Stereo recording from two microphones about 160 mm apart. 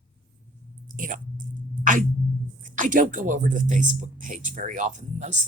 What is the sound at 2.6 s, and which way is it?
Speech, 55° right (ahead or behind).